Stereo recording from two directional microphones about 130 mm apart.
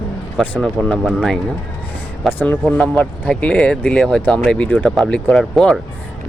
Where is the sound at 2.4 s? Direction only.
15° left (ahead or behind).